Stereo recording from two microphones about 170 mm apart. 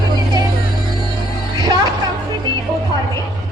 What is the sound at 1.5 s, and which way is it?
Music, 25° right (ahead or behind).